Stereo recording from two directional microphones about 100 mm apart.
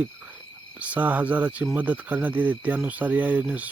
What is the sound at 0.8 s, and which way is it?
Speech, 15° right (ahead or behind).